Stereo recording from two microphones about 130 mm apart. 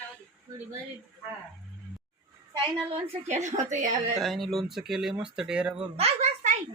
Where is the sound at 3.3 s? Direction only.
65° right (ahead or behind).